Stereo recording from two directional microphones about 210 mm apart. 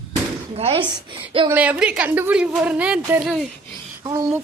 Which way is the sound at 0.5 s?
25° right (ahead or behind).